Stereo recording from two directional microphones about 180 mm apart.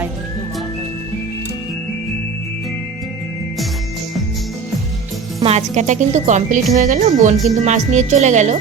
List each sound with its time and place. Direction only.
5.4 s speech: 35° right (ahead or behind)